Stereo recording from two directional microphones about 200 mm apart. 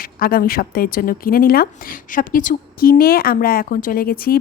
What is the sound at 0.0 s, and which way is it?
Speech, 45° left (ahead or behind).